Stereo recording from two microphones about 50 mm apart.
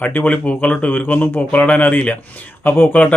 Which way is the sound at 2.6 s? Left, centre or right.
Left.